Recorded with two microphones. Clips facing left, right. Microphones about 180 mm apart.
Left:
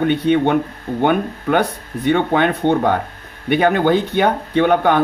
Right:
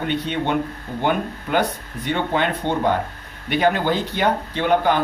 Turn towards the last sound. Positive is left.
turn(degrees=60)  # may be behind; listen again after turning